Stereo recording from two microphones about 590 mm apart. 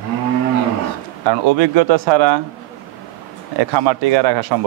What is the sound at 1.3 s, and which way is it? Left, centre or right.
A man's voice, right.